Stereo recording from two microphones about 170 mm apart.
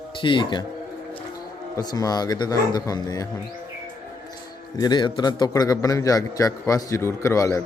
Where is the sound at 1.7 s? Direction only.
20° left (ahead or behind).